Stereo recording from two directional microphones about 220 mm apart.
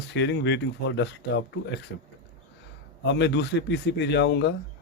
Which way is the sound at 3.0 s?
50° left (ahead or behind).